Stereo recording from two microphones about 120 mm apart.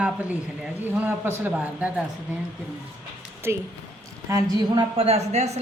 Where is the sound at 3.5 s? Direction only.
20° right (ahead or behind).